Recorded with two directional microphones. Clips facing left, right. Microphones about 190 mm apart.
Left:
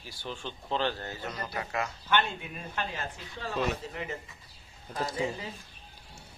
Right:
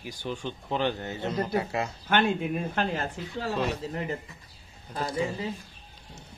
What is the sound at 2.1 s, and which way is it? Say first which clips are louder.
Speech: right 6 dB; 50° right (ahead or behind).